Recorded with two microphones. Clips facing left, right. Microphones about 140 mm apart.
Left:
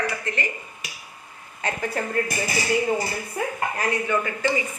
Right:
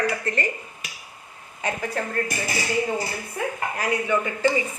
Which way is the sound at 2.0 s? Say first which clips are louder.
Left 1 dB; 5° left (ahead or behind).